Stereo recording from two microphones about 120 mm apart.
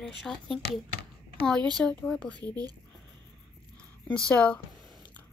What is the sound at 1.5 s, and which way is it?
Speech, 35° right (ahead or behind).